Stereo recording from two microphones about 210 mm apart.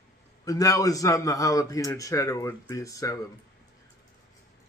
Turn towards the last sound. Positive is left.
turn(degrees=15)  # may be behind; listen again after turning